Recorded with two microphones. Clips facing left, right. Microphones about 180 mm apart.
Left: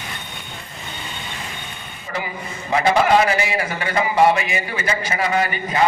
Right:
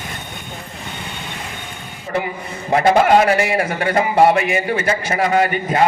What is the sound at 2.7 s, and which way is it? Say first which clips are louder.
A man's voice: right 3 dB; 50° right (ahead or behind).